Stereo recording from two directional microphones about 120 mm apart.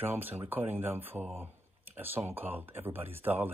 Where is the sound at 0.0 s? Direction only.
15° right (ahead or behind).